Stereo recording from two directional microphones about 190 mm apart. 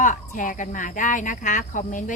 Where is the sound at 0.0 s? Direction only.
45° left (ahead or behind).